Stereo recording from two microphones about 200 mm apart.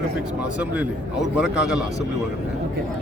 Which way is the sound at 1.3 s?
5° right (ahead or behind).